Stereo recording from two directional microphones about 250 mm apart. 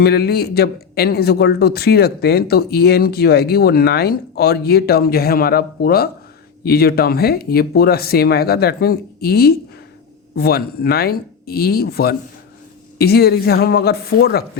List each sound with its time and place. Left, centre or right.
0.0 s speech: left